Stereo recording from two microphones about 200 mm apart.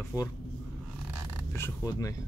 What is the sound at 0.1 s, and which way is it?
Speech, 10° right (ahead or behind).